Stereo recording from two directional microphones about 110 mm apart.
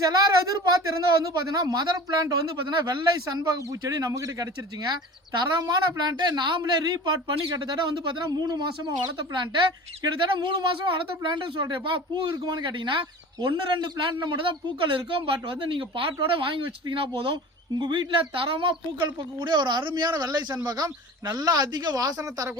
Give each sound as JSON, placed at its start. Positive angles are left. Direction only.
{"t": 0.0, "sound": "speech", "side_deg": -35}